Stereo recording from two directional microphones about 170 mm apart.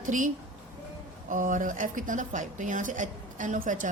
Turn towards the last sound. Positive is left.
turn(degrees=-50)  # may be behind; listen again after turning